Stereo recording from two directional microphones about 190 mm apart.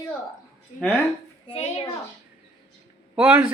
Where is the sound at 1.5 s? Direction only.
35° left (ahead or behind).